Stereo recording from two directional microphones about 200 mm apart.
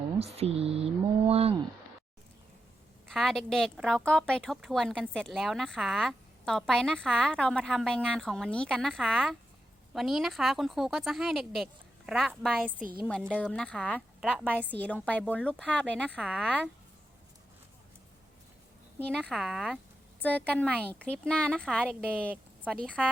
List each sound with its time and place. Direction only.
0.3 s speech: 30° right (ahead or behind)
3.1 s a woman's voice: centre (ahead or behind)
19.2 s a woman's voice: centre (ahead or behind)